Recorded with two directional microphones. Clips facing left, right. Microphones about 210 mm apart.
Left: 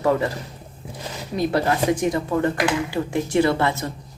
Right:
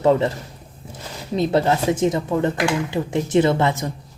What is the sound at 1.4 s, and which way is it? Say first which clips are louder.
A woman's voice: right 2 dB; 25° right (ahead or behind).